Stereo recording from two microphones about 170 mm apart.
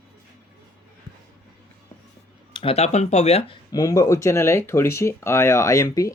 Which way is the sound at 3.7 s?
20° left (ahead or behind).